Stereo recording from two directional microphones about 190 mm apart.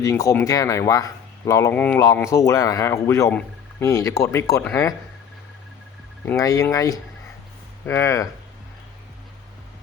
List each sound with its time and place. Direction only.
0.0 s speech: 15° left (ahead or behind)
6.2 s speech: 15° left (ahead or behind)